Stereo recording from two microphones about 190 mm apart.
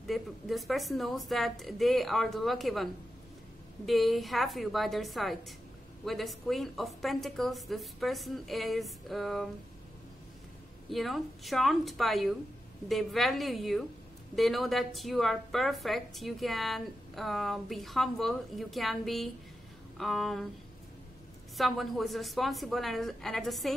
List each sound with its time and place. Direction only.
0.0 s a woman's voice: centre (ahead or behind)
10.9 s a woman's voice: centre (ahead or behind)
21.5 s a woman's voice: centre (ahead or behind)